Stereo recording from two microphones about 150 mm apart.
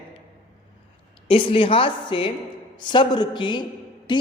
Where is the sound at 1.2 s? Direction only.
35° left (ahead or behind).